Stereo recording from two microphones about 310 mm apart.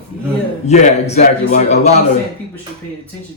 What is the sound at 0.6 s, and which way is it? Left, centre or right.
Speech, left.